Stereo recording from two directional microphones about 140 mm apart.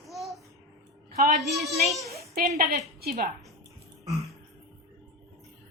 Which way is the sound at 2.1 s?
90° right.